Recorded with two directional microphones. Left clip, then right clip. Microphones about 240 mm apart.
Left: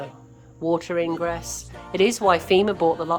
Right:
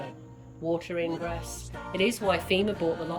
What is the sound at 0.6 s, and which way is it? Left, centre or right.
A woman's voice, centre.